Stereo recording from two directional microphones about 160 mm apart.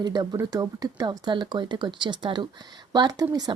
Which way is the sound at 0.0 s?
25° right (ahead or behind).